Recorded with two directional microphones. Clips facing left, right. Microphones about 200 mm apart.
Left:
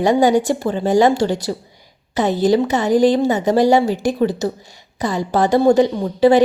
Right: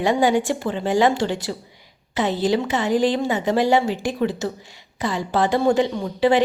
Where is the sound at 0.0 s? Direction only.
40° left (ahead or behind).